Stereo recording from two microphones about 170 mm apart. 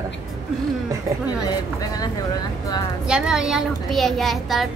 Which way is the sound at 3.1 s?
5° right (ahead or behind).